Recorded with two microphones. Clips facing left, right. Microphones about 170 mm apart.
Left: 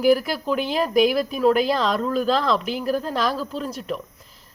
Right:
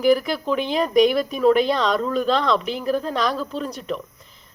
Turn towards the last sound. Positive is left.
turn(degrees=5)  # may be behind; listen again after turning